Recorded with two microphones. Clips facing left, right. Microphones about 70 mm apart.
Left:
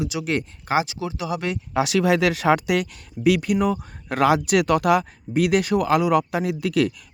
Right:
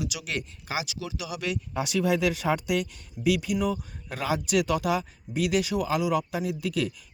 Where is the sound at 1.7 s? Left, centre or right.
Left.